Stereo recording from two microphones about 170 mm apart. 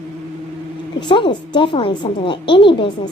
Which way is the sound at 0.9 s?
30° left (ahead or behind).